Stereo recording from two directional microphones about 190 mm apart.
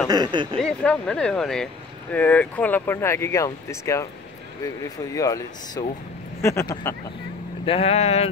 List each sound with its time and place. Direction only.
0.1 s speech: 25° right (ahead or behind)
0.6 s speech: 5° left (ahead or behind)
7.6 s speech: 30° left (ahead or behind)